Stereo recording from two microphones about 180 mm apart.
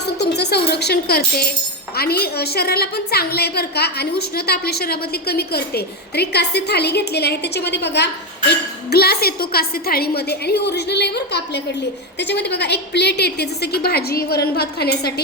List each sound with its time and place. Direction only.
0.2 s a woman's voice: 65° left (ahead or behind)